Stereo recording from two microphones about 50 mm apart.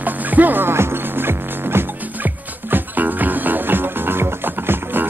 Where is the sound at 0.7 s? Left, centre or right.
Right.